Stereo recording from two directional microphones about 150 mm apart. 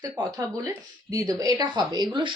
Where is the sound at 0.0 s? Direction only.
25° right (ahead or behind).